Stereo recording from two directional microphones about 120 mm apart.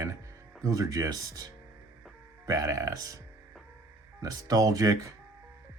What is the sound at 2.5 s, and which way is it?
Speech, 25° right (ahead or behind).